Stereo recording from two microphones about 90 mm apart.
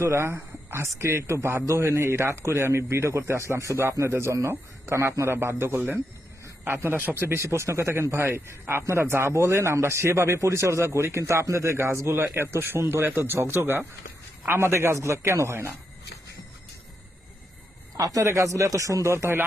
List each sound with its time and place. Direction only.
0.0 s a man's voice: 30° right (ahead or behind)
6.4 s a sound: 30° right (ahead or behind)
6.9 s a man's voice: 20° right (ahead or behind)
17.9 s a man's voice: 40° right (ahead or behind)